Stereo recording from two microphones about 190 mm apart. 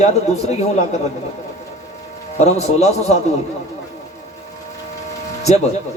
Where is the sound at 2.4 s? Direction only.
35° left (ahead or behind).